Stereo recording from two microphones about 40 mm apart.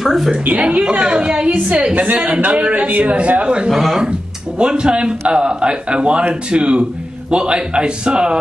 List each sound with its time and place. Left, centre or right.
0.0 s a woman's voice: centre
0.5 s a man's voice: right
3.6 s speech: centre
4.6 s a man's voice: right